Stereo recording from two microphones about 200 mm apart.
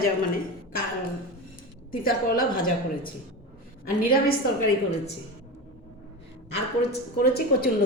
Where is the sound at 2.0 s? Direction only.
45° left (ahead or behind).